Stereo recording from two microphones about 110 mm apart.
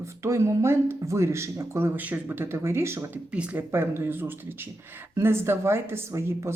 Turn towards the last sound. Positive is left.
turn(degrees=-25)  # may be behind; listen again after turning